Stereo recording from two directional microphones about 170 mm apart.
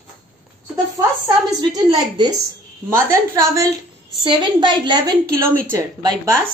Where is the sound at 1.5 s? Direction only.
25° right (ahead or behind).